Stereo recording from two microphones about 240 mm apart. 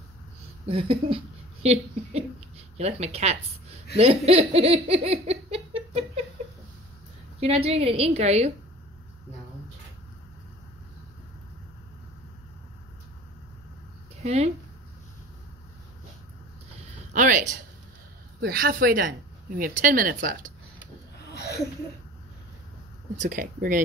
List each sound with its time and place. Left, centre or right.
0.7 s speech: right
3.9 s laughter: right
7.3 s laughter: right
14.2 s laughter: right
17.1 s a woman's voice: right
23.1 s a woman's voice: right